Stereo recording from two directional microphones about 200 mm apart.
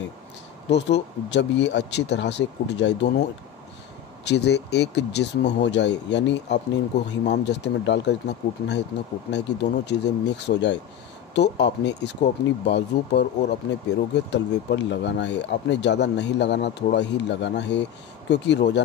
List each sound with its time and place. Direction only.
0.7 s speech: 60° left (ahead or behind)